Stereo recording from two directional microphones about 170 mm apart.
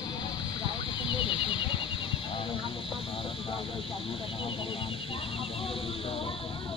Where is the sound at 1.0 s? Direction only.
30° left (ahead or behind).